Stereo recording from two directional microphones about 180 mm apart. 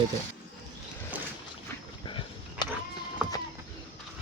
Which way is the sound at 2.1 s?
30° left (ahead or behind).